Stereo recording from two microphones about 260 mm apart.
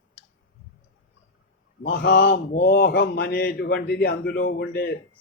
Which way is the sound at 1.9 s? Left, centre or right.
Left.